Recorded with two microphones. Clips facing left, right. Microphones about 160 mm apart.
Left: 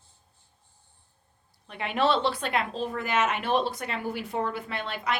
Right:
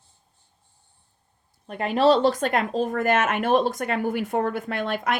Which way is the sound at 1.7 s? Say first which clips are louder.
Right 6 dB; 40° right (ahead or behind).